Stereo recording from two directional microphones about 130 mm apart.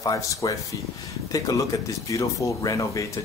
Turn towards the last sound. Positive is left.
turn(degrees=25)  # may be behind; listen again after turning